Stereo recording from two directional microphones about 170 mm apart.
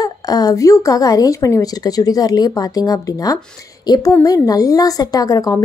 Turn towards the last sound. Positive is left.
turn(degrees=20)  # may be behind; listen again after turning